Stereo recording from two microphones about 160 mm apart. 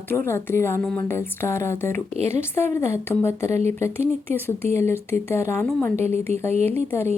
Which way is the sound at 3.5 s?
45° right (ahead or behind).